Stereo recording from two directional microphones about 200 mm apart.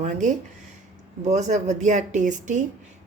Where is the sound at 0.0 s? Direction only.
40° right (ahead or behind).